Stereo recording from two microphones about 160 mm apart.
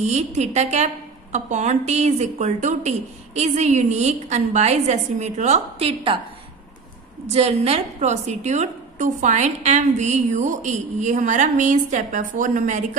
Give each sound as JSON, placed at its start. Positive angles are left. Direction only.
{"t": 0.0, "sound": "a woman's voice", "side_deg": -45}
{"t": 7.2, "sound": "a woman's voice", "side_deg": -40}